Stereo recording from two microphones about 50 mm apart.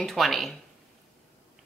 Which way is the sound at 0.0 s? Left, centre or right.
Centre.